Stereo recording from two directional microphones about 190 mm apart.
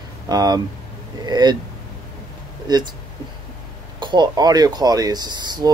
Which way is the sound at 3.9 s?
25° right (ahead or behind).